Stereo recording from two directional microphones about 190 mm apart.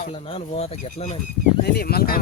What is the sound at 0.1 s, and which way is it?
Speech, 30° left (ahead or behind).